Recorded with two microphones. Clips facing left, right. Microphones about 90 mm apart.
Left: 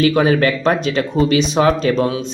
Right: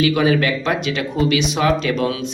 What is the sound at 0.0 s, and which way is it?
Speech, 40° left (ahead or behind).